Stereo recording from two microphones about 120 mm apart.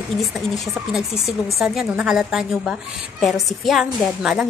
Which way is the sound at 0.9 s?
Centre (ahead or behind).